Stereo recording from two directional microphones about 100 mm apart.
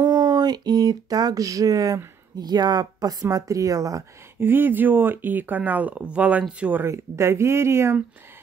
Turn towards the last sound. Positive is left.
turn(degrees=-25)  # may be behind; listen again after turning